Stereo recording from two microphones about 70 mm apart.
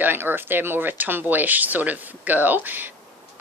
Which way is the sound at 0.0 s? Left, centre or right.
Right.